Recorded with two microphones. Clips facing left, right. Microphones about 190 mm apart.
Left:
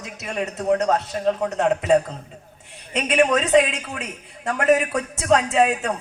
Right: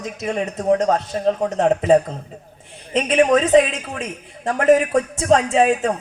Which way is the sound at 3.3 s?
40° right (ahead or behind).